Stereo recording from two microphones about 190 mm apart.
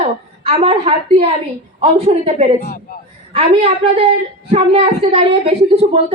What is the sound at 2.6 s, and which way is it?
Speech, 50° left (ahead or behind).